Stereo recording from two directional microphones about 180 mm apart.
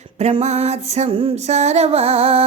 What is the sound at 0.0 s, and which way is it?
Music, 35° right (ahead or behind).